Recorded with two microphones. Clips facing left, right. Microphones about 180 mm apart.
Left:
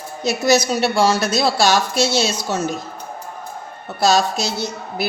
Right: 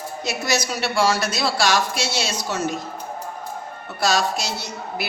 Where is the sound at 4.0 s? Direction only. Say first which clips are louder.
Left 5 dB; 25° left (ahead or behind).